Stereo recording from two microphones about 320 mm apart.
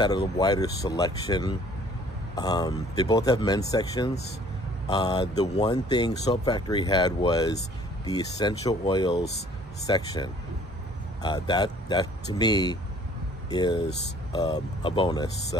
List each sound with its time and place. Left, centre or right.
0.4 s speech: centre